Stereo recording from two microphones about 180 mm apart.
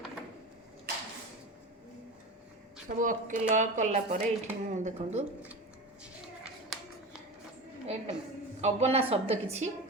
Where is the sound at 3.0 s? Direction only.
45° right (ahead or behind).